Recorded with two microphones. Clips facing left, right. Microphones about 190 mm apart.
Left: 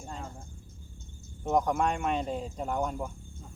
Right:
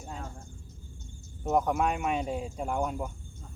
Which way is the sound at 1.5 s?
5° right (ahead or behind).